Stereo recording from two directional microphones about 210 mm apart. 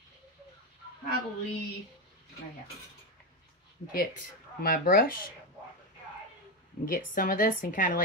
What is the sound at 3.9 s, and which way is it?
Speech, 45° left (ahead or behind).